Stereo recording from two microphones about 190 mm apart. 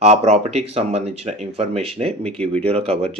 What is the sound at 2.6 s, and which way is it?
Speech, 30° right (ahead or behind).